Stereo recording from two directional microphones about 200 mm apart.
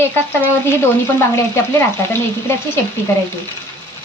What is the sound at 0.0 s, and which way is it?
Speech, 10° left (ahead or behind).